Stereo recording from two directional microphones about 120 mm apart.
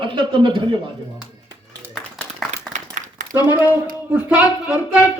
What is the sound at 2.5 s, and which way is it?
Applause, 90° right.